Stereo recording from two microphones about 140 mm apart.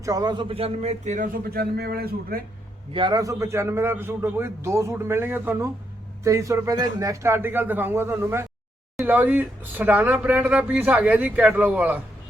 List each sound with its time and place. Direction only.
0.0 s speech: 25° right (ahead or behind); by 2.4 s 90° right
2.9 s a man's voice: 35° right (ahead or behind)
3.2 s a man's voice: 25° right (ahead or behind)